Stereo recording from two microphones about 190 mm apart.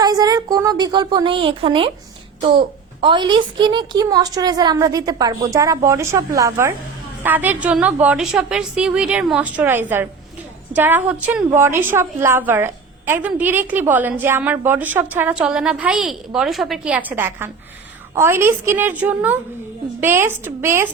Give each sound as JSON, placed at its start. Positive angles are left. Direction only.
{"t": 0.0, "sound": "a child's voice", "side_deg": -20}